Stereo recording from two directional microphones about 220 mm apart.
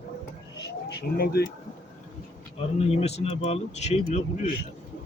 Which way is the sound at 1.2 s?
45° left (ahead or behind).